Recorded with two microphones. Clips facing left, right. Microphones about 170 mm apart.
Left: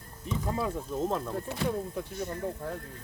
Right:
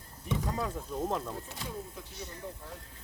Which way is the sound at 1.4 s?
65° left (ahead or behind).